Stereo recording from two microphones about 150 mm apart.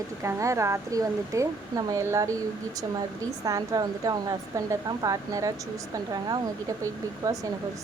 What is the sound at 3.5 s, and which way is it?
A woman's voice, 25° right (ahead or behind).